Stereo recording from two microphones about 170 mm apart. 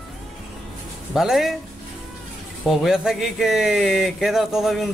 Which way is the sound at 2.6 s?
Centre (ahead or behind).